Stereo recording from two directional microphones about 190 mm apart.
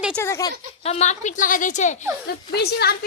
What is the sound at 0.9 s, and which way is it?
A woman's voice, 35° left (ahead or behind).